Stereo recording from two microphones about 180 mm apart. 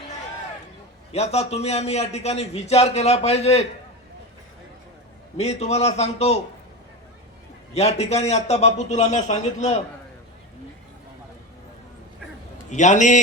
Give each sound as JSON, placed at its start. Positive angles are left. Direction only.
{"t": 1.1, "sound": "a man's voice", "side_deg": 35}
{"t": 5.4, "sound": "a man's voice", "side_deg": 35}
{"t": 7.7, "sound": "a man's voice", "side_deg": 35}
{"t": 12.7, "sound": "a man's voice", "side_deg": 40}